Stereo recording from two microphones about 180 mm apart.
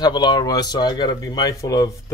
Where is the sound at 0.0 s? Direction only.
25° left (ahead or behind).